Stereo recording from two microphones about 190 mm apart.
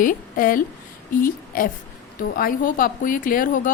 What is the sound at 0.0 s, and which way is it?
A woman's voice, 45° left (ahead or behind).